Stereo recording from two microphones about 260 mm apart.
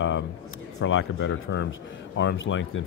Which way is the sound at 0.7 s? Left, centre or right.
Left.